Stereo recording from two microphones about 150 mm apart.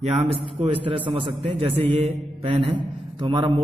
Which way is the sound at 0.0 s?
40° right (ahead or behind).